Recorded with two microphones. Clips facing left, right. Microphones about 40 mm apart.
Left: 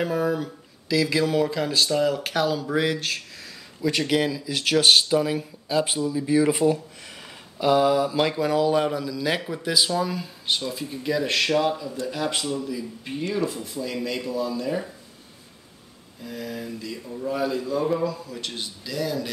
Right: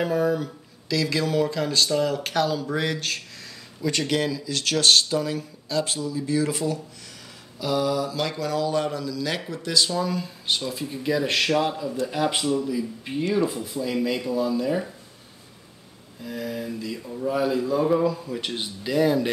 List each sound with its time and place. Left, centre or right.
0.0 s speech: centre
16.2 s speech: centre; by 19.3 s right